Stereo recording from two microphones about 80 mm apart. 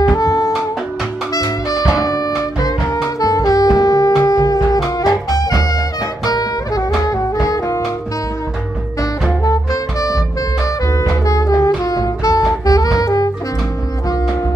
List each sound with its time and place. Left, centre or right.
0.1 s music: left
3.2 s saxophone: left
4.2 s music: left
7.4 s saxophone: left
9.4 s music: left